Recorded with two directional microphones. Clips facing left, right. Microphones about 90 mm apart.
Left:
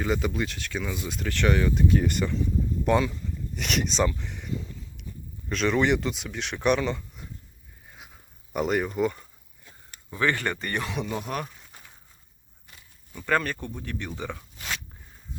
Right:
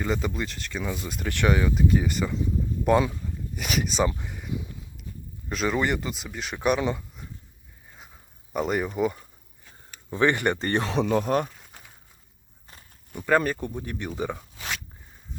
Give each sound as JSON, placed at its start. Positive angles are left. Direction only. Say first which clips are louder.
{"t": 0.0, "sound": "speech", "louder": "left 1 dB", "side_deg": 0}
{"t": 3.5, "sound": "speech", "louder": "even", "side_deg": -5}
{"t": 4.2, "sound": "a sound", "louder": "even", "side_deg": -10}
{"t": 5.5, "sound": "speech", "louder": "left 2 dB", "side_deg": -5}
{"t": 6.7, "sound": "speech", "louder": "right 1 dB", "side_deg": -15}
{"t": 8.5, "sound": "speech", "louder": "even", "side_deg": 0}
{"t": 10.1, "sound": "speech", "louder": "right 4 dB", "side_deg": -25}
{"t": 10.6, "sound": "speech", "louder": "right 6 dB", "side_deg": -30}
{"t": 11.4, "sound": "crumpling", "louder": "right 2 dB", "side_deg": -5}
{"t": 13.1, "sound": "speech", "louder": "right 3 dB", "side_deg": -10}